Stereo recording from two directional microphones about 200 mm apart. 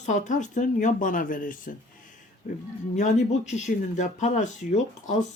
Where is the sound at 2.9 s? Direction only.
40° left (ahead or behind).